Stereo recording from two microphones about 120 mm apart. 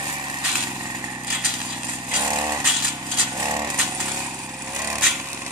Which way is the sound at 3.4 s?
30° right (ahead or behind).